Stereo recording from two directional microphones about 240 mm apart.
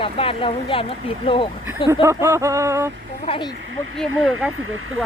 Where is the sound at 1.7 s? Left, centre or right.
Centre.